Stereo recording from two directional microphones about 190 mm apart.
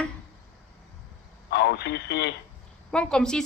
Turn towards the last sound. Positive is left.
turn(degrees=5)  # may be behind; listen again after turning